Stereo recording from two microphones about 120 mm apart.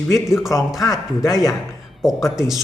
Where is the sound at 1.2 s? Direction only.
30° left (ahead or behind).